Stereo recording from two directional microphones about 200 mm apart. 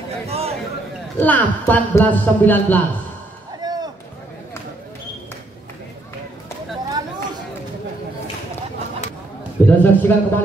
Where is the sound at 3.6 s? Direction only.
20° right (ahead or behind).